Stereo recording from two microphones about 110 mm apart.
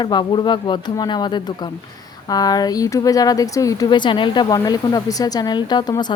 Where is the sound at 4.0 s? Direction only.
45° left (ahead or behind).